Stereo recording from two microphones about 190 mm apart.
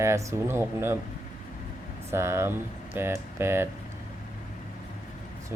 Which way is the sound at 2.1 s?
15° right (ahead or behind).